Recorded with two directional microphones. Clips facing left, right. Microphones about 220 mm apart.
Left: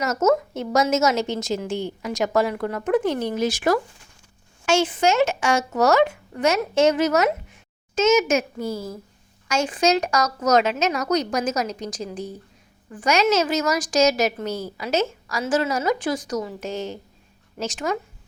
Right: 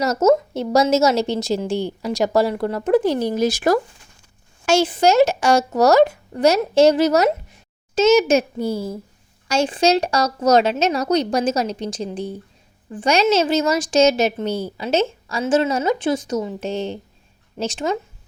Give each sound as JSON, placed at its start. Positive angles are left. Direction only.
{"t": 0.0, "sound": "a woman's voice", "side_deg": -35}